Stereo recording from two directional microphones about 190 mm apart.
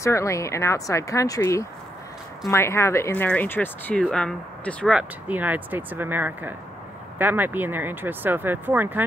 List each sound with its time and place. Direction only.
0.0 s speech: 15° left (ahead or behind)
4.9 s speech: 10° right (ahead or behind)